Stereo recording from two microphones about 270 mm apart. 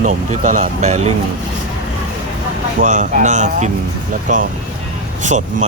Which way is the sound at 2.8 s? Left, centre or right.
Right.